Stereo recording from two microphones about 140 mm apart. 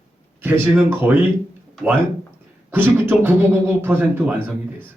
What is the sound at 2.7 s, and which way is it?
A man's voice, 15° right (ahead or behind).